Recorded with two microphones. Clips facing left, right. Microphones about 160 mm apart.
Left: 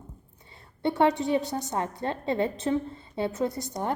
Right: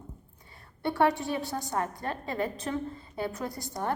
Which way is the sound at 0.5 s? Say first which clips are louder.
Left 3 dB; 20° left (ahead or behind).